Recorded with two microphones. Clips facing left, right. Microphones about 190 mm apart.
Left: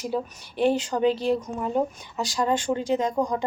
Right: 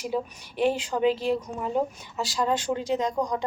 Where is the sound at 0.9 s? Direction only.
Centre (ahead or behind).